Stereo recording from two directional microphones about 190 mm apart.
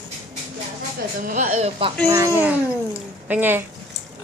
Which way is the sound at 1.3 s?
40° right (ahead or behind).